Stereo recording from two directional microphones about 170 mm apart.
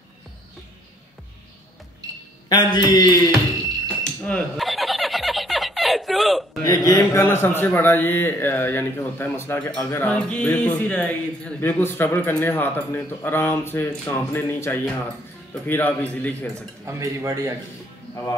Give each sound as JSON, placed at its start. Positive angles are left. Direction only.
{"t": 2.5, "sound": "speech", "side_deg": 25}
{"t": 4.0, "sound": "a sound", "side_deg": 5}
{"t": 6.6, "sound": "speech", "side_deg": 20}
{"t": 10.0, "sound": "speech", "side_deg": 5}
{"t": 16.5, "sound": "speech", "side_deg": -15}